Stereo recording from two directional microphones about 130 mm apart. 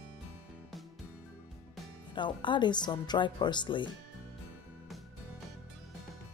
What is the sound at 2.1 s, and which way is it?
Speech, 40° left (ahead or behind).